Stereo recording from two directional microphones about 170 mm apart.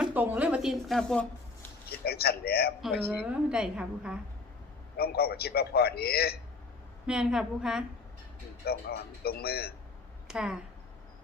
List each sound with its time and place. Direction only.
0.0 s speech: 10° right (ahead or behind)
1.9 s a man's voice: 65° left (ahead or behind)
3.1 s a woman's voice: 5° right (ahead or behind)
4.9 s a man's voice: 65° left (ahead or behind)
7.1 s a woman's voice: 5° right (ahead or behind)
8.6 s a man's voice: 65° left (ahead or behind)
10.2 s speech: 5° right (ahead or behind)